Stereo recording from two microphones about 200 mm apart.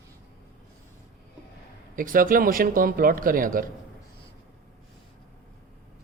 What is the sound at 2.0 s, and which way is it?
Speech, 45° right (ahead or behind).